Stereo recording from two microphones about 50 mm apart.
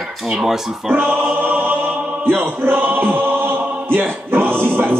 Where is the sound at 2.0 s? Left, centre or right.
Right.